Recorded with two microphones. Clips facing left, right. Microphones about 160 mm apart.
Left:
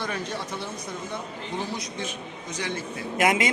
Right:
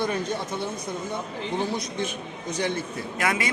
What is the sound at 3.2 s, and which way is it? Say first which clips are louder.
Speech: left 4 dB; 20° left (ahead or behind).